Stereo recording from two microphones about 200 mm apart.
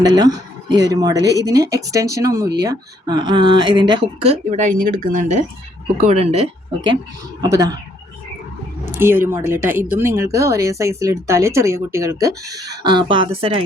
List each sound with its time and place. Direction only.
0.0 s speech: 20° right (ahead or behind)
9.0 s speech: 10° right (ahead or behind); by 13.6 s 25° right (ahead or behind)